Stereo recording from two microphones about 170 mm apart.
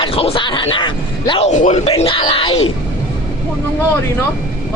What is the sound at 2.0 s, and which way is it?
Speech, 30° left (ahead or behind).